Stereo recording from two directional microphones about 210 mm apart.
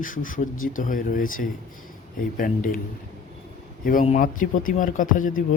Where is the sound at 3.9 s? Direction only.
35° left (ahead or behind).